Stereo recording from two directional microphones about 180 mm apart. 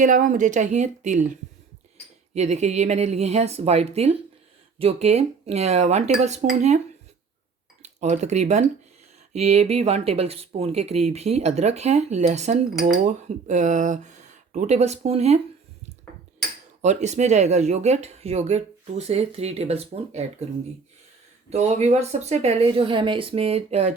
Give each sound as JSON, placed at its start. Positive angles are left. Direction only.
{"t": 0.0, "sound": "speech", "side_deg": -45}
{"t": 2.3, "sound": "speech", "side_deg": -40}
{"t": 7.8, "sound": "speech", "side_deg": -40}
{"t": 16.8, "sound": "speech", "side_deg": -40}
{"t": 21.5, "sound": "speech", "side_deg": -40}